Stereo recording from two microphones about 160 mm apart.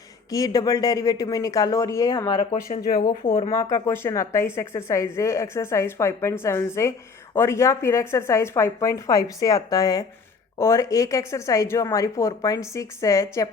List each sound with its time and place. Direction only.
0.3 s a woman's voice: 20° left (ahead or behind)
2.9 s speech: 65° left (ahead or behind)
3.5 s a woman's voice: 20° left (ahead or behind)